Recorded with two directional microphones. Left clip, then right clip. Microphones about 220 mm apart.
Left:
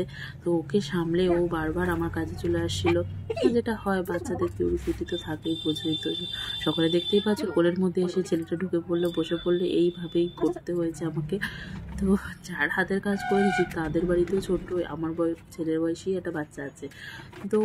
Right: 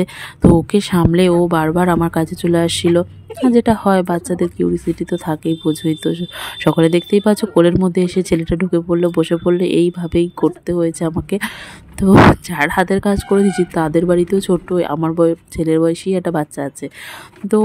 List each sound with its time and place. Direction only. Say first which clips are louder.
0.7 s speech: right 11 dB; 45° right (ahead or behind)